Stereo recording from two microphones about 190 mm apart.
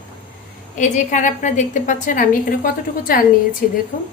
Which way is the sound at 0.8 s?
40° left (ahead or behind).